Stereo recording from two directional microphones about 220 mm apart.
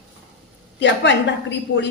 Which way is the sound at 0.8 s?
55° left (ahead or behind).